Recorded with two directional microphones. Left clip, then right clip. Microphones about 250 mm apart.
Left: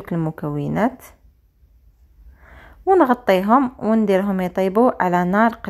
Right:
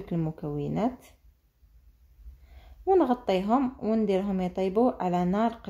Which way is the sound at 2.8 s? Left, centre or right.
Left.